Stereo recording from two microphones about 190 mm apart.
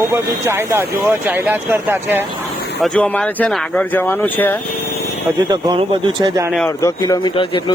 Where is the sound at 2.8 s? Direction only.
5° left (ahead or behind).